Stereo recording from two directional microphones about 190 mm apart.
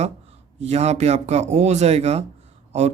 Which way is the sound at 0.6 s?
35° right (ahead or behind).